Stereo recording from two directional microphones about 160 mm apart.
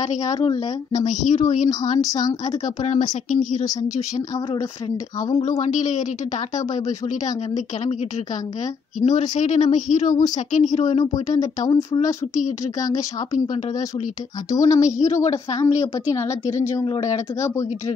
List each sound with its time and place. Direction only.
0.2 s a woman's voice: 25° left (ahead or behind)
1.3 s a woman's voice: 50° left (ahead or behind)
2.0 s a woman's voice: 25° left (ahead or behind)
2.8 s a woman's voice: 50° left (ahead or behind)
5.6 s a woman's voice: 50° left (ahead or behind)
9.0 s a woman's voice: 50° left (ahead or behind)
11.3 s a woman's voice: 25° left (ahead or behind)
14.5 s a woman's voice: 20° left (ahead or behind)
14.8 s a woman's voice: 50° left (ahead or behind)
15.1 s a woman's voice: 20° left (ahead or behind)
16.4 s a woman's voice: 45° left (ahead or behind)
16.7 s a woman's voice: 25° left (ahead or behind)